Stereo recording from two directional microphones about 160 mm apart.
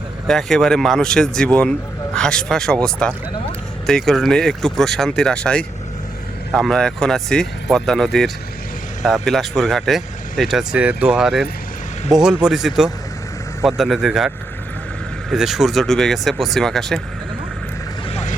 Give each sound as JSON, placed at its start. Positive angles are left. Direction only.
{"t": 0.3, "sound": "speech", "side_deg": 5}
{"t": 18.1, "sound": "boat", "side_deg": 45}